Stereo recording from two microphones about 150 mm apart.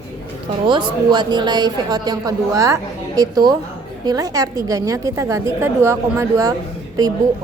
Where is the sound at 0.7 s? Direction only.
30° right (ahead or behind).